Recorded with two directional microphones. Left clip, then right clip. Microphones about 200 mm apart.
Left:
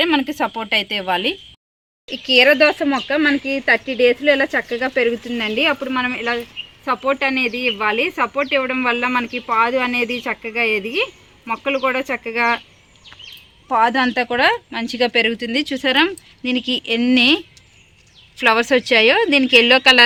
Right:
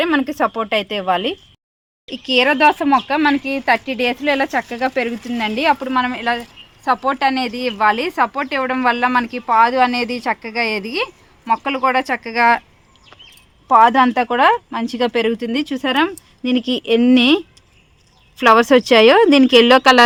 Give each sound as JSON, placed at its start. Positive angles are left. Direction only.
{"t": 0.0, "sound": "a woman's voice", "side_deg": -30}
{"t": 2.0, "sound": "speech", "side_deg": -55}
{"t": 13.7, "sound": "speech", "side_deg": -45}